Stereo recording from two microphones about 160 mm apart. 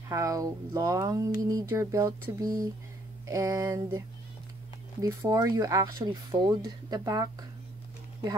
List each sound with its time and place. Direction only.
0.1 s speech: 20° right (ahead or behind)
5.0 s speech: 20° right (ahead or behind)